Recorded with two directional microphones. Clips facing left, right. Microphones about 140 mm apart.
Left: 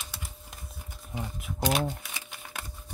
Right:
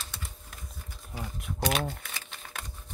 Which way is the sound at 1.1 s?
20° left (ahead or behind).